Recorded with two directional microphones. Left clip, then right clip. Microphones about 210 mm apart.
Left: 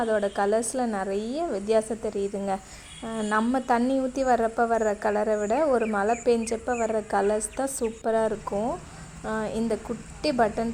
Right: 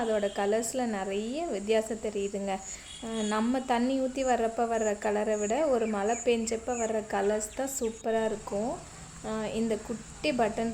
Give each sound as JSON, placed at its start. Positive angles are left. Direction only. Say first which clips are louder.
{"t": 0.1, "sound": "a woman's voice", "louder": "left 4 dB", "side_deg": 20}